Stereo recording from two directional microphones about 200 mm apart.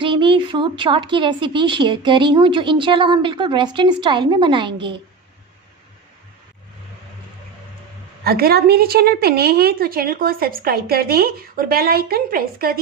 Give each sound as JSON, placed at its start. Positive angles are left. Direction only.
{"t": 0.0, "sound": "a woman's voice", "side_deg": -25}
{"t": 8.2, "sound": "a woman's voice", "side_deg": -50}